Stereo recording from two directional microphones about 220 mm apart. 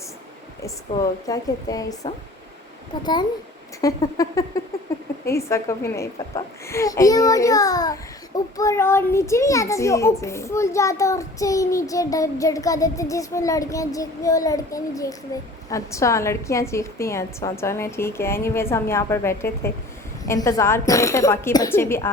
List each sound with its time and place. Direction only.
1.3 s a child's voice: 15° left (ahead or behind)